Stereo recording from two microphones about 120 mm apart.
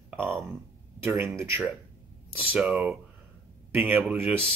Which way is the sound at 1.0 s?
20° right (ahead or behind).